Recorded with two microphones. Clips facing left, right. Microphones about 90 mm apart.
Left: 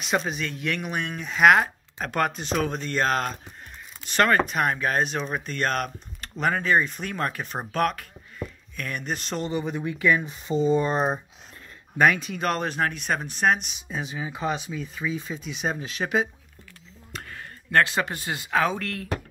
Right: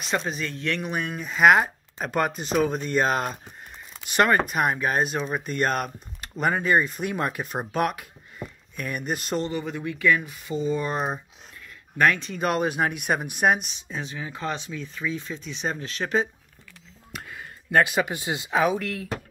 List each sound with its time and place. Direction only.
0.0 s speech: 5° left (ahead or behind)
9.4 s speech: 20° left (ahead or behind)
12.0 s speech: 10° left (ahead or behind)
12.4 s speech: 5° right (ahead or behind)
13.7 s speech: 10° left (ahead or behind)
17.1 s speech: 5° right (ahead or behind)